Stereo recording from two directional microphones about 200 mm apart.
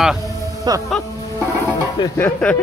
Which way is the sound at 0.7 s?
20° right (ahead or behind).